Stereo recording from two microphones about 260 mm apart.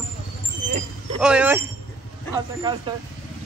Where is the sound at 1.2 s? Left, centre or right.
Centre.